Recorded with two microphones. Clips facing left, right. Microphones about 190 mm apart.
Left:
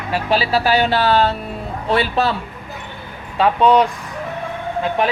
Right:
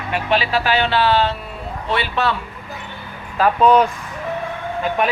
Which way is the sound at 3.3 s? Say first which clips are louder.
Even; centre (ahead or behind).